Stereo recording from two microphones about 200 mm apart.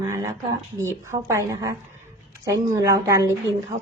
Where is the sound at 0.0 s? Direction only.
15° right (ahead or behind).